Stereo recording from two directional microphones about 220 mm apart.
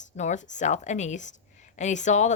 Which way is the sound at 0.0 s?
35° left (ahead or behind).